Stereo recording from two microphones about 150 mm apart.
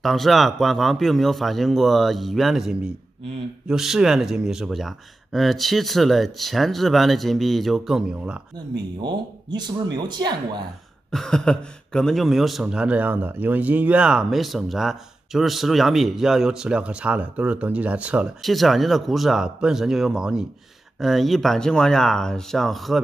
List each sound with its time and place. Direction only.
0.0 s speech: centre (ahead or behind)
9.0 s speech: 30° right (ahead or behind)
11.1 s speech: 5° left (ahead or behind)